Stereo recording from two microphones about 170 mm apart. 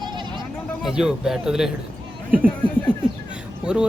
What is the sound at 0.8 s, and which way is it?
Speech, 5° right (ahead or behind).